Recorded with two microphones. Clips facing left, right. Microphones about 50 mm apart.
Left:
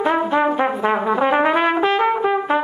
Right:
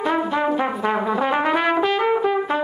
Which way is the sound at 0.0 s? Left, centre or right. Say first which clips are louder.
Left 3 dB; centre.